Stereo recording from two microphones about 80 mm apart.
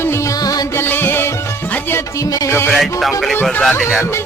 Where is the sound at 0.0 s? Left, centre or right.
Left.